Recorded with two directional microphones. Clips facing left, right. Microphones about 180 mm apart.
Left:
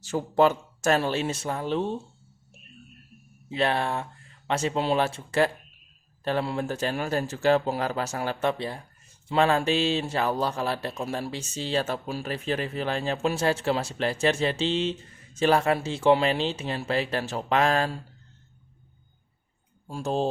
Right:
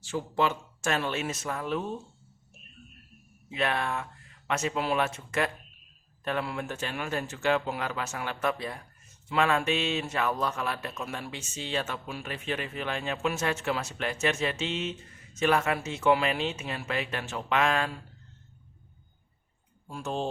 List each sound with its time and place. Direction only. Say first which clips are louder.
0.0 s speech: left 6 dB; 40° left (ahead or behind)
3.5 s speech: left 4 dB; 30° left (ahead or behind)
19.9 s speech: left 5 dB; 35° left (ahead or behind)